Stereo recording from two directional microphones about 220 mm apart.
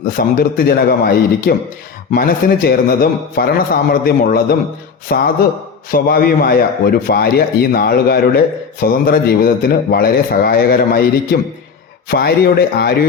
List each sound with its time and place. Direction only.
0.1 s a man's voice: 40° left (ahead or behind)